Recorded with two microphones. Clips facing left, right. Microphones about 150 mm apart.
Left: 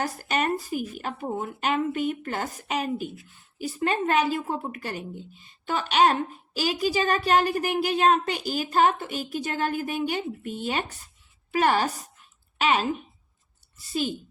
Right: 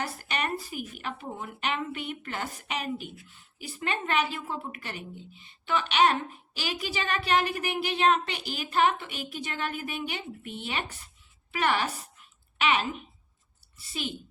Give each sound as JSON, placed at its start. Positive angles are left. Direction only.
{"t": 0.0, "sound": "a woman's voice", "side_deg": 40}